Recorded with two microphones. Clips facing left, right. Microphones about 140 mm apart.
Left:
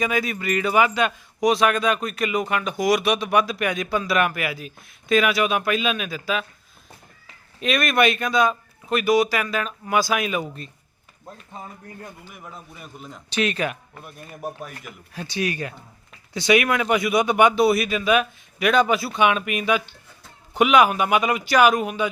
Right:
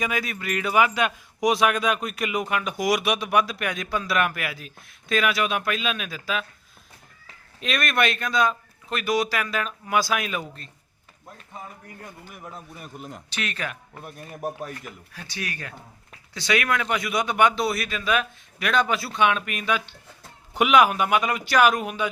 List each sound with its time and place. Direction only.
0.0 s a man's voice: centre (ahead or behind)
7.6 s a man's voice: 5° left (ahead or behind)
13.3 s speech: 20° left (ahead or behind)
15.1 s a man's voice: 20° left (ahead or behind); by 22.1 s centre (ahead or behind)